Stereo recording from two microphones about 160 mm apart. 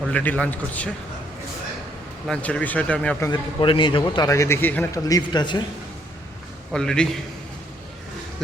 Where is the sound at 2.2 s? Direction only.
5° left (ahead or behind).